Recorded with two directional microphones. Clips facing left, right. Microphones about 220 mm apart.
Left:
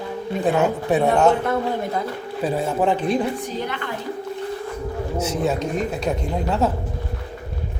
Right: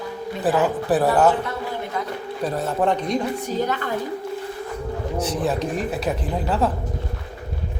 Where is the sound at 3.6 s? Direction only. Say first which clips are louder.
Right 3 dB; 40° right (ahead or behind).